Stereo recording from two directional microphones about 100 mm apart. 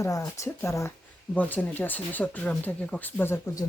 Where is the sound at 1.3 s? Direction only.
15° left (ahead or behind).